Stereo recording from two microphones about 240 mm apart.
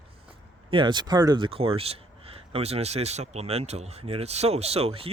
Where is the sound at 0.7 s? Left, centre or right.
Centre.